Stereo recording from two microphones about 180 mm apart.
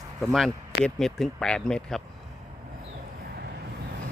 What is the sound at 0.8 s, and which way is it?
Speech, centre (ahead or behind).